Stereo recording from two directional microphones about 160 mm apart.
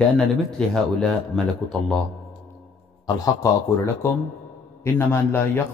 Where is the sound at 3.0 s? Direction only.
20° left (ahead or behind).